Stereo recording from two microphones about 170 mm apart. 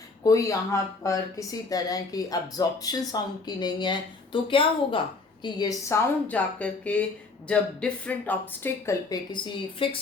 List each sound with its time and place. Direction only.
0.2 s a woman's voice: 20° left (ahead or behind)